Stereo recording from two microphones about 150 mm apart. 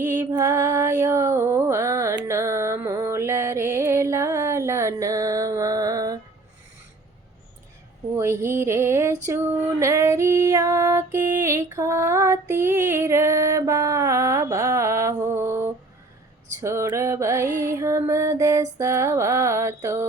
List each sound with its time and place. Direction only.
0.0 s music: 15° right (ahead or behind)
8.1 s a sound: 15° right (ahead or behind)
9.2 s female singing: 15° right (ahead or behind)
16.6 s music: 20° right (ahead or behind)